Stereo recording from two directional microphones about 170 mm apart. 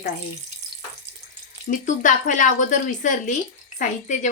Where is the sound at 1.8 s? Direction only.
50° left (ahead or behind).